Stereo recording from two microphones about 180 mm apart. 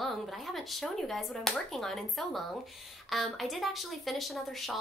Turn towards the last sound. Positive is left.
turn(degrees=0)  # may be behind; listen again after turning